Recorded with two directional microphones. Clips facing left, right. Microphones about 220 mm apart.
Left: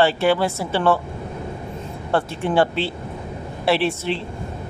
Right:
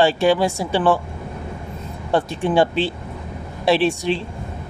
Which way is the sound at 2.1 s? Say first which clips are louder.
Right 2 dB; 15° right (ahead or behind).